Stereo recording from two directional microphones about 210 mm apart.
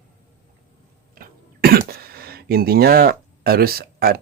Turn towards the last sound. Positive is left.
turn(degrees=-45)  # may be behind; listen again after turning